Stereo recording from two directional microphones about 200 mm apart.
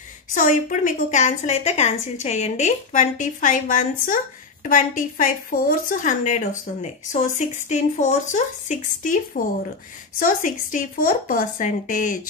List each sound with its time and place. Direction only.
0.3 s a woman's voice: 40° left (ahead or behind)